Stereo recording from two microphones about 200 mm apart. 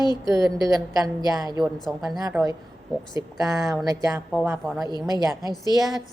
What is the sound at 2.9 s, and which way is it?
Speech, centre (ahead or behind).